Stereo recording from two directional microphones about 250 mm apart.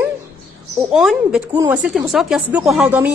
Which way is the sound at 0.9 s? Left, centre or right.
Centre.